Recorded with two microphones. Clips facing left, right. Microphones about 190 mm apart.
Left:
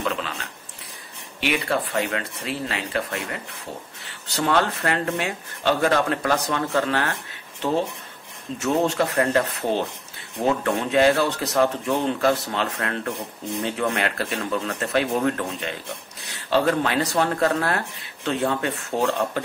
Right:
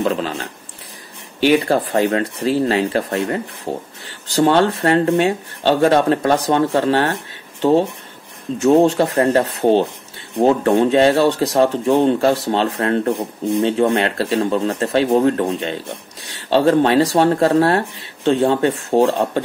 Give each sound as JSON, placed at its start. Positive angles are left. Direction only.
{"t": 0.0, "sound": "speech", "side_deg": -35}
{"t": 8.6, "sound": "speech", "side_deg": -30}